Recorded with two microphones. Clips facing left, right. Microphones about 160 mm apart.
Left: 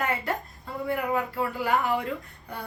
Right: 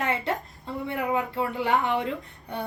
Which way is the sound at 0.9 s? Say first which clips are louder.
Even; 25° right (ahead or behind).